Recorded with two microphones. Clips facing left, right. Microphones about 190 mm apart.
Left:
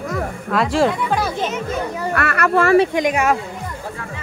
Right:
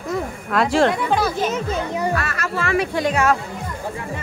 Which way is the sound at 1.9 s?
15° right (ahead or behind).